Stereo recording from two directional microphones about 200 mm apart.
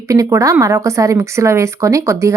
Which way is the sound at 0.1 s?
15° right (ahead or behind).